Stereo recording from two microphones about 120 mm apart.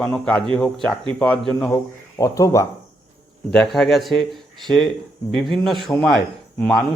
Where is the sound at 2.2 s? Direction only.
25° left (ahead or behind).